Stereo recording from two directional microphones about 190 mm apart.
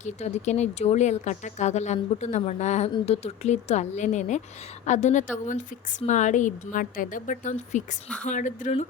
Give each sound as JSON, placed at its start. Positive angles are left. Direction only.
{"t": 0.0, "sound": "a woman's voice", "side_deg": 35}